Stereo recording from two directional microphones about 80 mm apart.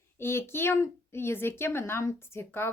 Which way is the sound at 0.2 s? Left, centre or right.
Left.